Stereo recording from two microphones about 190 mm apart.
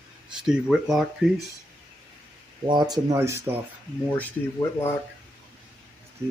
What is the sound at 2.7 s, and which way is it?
Speech, 20° right (ahead or behind).